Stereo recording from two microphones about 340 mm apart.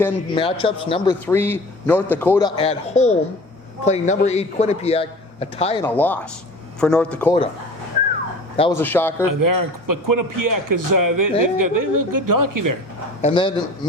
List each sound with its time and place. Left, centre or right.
0.0 s a man's voice: centre
2.6 s a man's voice: centre
5.8 s a man's voice: centre
8.5 s a man's voice: centre
9.2 s a man's voice: right
13.2 s a man's voice: centre